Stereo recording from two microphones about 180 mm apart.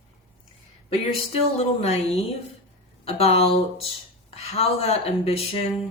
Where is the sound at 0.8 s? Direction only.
35° left (ahead or behind).